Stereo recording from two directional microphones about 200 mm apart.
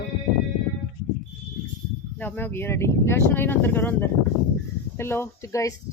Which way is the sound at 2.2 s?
10° left (ahead or behind).